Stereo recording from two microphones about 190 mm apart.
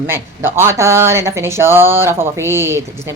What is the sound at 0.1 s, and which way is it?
Speech, 10° right (ahead or behind).